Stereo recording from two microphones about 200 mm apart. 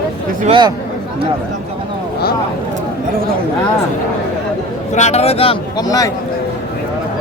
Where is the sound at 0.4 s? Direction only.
25° right (ahead or behind).